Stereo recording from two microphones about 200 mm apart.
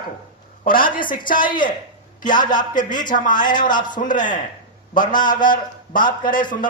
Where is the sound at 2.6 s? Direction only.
40° left (ahead or behind).